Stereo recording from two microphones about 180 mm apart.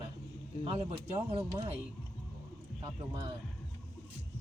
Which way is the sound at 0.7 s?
35° right (ahead or behind).